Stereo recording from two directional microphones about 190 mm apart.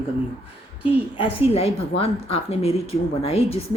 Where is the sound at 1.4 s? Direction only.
35° left (ahead or behind).